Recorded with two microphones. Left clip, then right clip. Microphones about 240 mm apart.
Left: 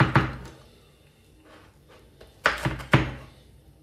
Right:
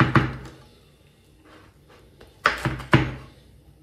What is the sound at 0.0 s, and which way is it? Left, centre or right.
Music, centre.